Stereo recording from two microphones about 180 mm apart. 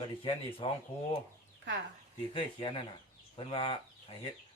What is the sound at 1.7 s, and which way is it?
Speech, 80° right.